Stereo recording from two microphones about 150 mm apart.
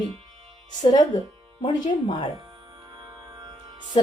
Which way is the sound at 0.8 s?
25° left (ahead or behind).